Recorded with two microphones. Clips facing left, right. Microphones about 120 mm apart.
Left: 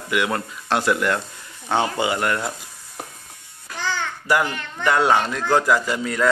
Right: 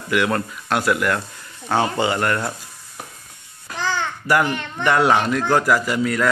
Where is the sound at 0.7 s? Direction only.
30° left (ahead or behind).